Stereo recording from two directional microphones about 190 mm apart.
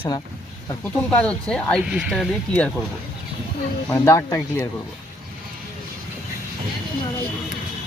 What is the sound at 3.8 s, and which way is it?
Speech, 15° left (ahead or behind).